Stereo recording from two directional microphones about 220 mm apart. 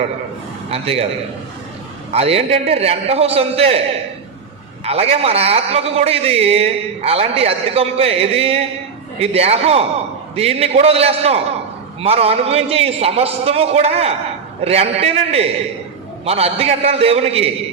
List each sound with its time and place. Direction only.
0.7 s a man's voice: 25° right (ahead or behind)
2.1 s a man's voice: 25° right (ahead or behind)
4.9 s a man's voice: 25° right (ahead or behind)